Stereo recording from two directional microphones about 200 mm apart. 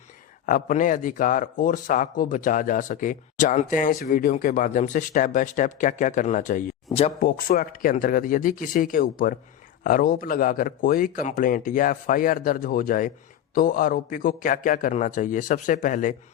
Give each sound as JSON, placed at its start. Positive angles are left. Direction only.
{"t": 0.4, "sound": "a man's voice", "side_deg": 40}
{"t": 7.3, "sound": "a man's voice", "side_deg": 45}